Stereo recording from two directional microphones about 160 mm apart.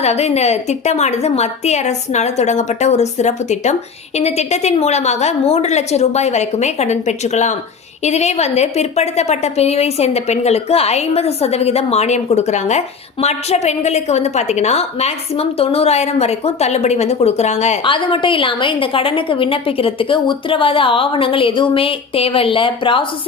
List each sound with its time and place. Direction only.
0.0 s a woman's voice: 45° left (ahead or behind)
17.8 s a woman's voice: 30° left (ahead or behind)